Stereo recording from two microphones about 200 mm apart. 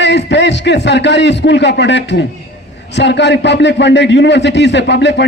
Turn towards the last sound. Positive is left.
turn(degrees=60)  # may be behind; listen again after turning